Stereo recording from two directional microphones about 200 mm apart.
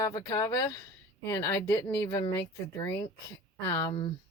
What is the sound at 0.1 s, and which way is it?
Speech, 20° left (ahead or behind).